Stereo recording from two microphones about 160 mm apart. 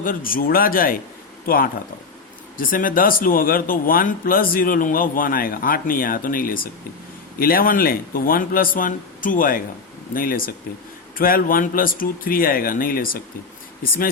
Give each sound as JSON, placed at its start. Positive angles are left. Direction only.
{"t": 0.0, "sound": "a man's voice", "side_deg": 60}